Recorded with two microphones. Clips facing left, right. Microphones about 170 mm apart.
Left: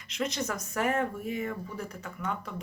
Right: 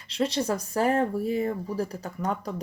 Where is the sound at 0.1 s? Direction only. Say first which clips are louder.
Right 6 dB; 30° right (ahead or behind).